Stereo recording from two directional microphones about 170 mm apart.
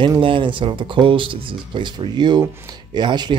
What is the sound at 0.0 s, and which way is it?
Speech, 30° right (ahead or behind).